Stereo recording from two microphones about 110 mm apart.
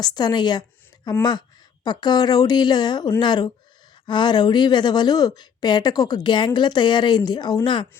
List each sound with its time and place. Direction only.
0.0 s speech: 40° left (ahead or behind)